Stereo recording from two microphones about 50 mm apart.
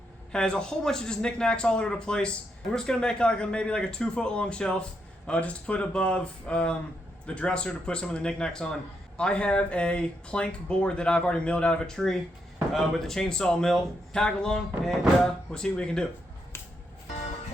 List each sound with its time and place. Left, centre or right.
0.3 s speech: centre
11.9 s speech: centre